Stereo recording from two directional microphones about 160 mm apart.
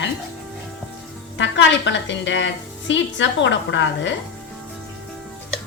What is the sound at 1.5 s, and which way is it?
Speech, 90° left.